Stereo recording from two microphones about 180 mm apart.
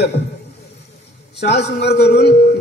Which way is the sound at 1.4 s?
65° left (ahead or behind).